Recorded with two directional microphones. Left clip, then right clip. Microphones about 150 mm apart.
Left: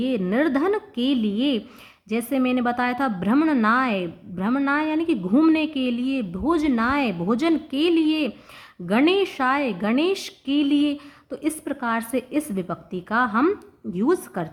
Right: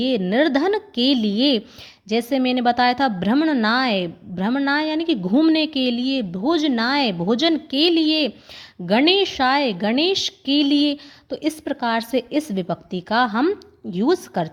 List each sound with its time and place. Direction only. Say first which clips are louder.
0.0 s a woman's voice: right 4 dB; 30° right (ahead or behind)